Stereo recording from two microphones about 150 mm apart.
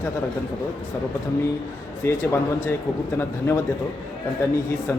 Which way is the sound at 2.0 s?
20° left (ahead or behind).